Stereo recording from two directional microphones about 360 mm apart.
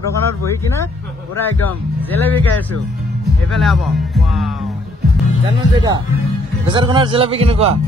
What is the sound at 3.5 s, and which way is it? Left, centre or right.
Speech, centre.